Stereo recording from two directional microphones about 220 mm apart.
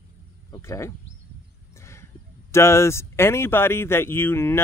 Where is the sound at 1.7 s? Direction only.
10° left (ahead or behind).